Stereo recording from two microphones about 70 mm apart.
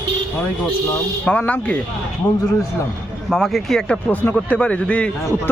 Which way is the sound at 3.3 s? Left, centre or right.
Centre.